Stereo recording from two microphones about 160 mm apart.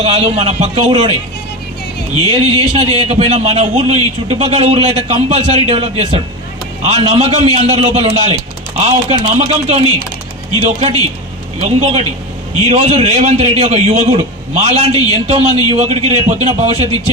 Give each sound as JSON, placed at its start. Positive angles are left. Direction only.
{"t": 0.0, "sound": "a man's voice", "side_deg": -40}
{"t": 2.3, "sound": "a man's voice", "side_deg": -35}